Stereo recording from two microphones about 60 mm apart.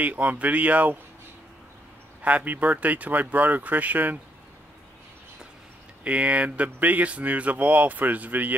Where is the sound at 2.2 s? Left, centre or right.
Right.